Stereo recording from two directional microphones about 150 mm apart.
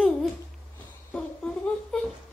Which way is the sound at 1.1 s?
5° left (ahead or behind).